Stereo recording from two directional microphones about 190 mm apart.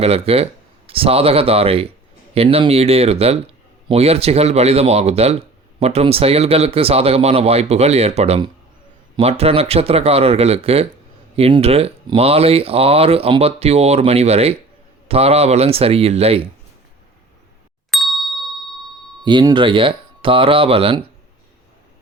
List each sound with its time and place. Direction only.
0.0 s speech: 30° right (ahead or behind)
17.9 s ding: centre (ahead or behind)
19.2 s speech: 25° right (ahead or behind)